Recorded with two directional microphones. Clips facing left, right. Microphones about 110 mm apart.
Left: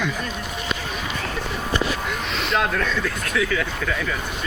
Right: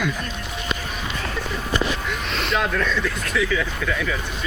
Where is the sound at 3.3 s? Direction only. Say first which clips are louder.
Even; 50° left (ahead or behind).